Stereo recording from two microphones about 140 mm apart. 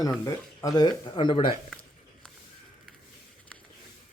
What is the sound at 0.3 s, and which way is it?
Speech, 25° left (ahead or behind).